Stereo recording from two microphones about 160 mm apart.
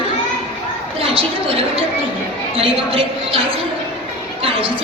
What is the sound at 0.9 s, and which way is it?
A woman's voice, 35° right (ahead or behind).